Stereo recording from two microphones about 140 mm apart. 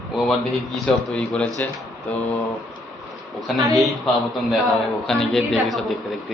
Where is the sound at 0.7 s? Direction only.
5° left (ahead or behind).